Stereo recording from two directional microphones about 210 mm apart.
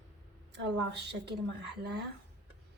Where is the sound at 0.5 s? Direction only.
55° right (ahead or behind).